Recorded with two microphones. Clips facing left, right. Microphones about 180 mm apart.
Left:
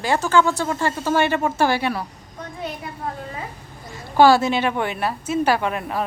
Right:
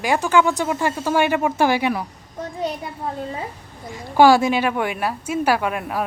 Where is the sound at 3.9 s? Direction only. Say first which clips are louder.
Right 1 dB; 15° right (ahead or behind).